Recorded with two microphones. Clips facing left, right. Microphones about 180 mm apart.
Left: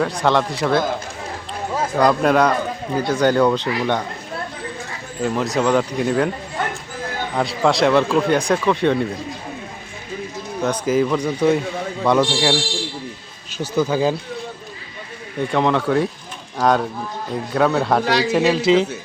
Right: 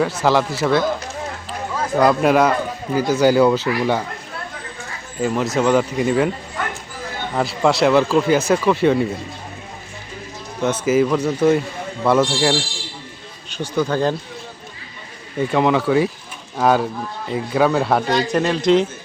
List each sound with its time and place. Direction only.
0.0 s a man's voice: 5° right (ahead or behind)
2.0 s a man's voice: 5° right (ahead or behind)
5.2 s a man's voice: centre (ahead or behind)
7.3 s a man's voice: centre (ahead or behind)
10.6 s a man's voice: 5° right (ahead or behind)
13.7 s speech: 5° left (ahead or behind)
15.4 s a man's voice: 5° right (ahead or behind)
18.0 s speech: 75° left (ahead or behind)
18.3 s a man's voice: centre (ahead or behind)